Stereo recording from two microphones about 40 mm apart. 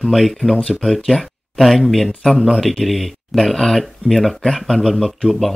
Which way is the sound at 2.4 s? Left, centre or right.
Centre.